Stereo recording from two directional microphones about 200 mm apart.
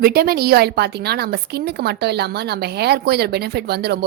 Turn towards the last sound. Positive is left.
turn(degrees=-55)  # may be behind; listen again after turning